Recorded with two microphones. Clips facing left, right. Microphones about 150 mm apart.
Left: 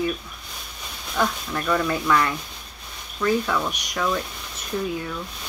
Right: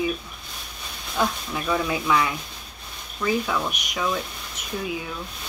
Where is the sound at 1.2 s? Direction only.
5° right (ahead or behind).